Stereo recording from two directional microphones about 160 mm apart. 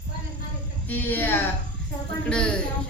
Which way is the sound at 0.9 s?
10° left (ahead or behind).